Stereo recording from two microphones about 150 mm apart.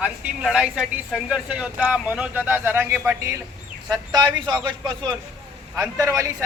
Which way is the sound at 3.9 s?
25° right (ahead or behind).